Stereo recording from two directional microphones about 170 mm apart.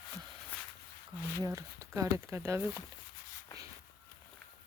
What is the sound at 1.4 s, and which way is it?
Speech, 20° right (ahead or behind).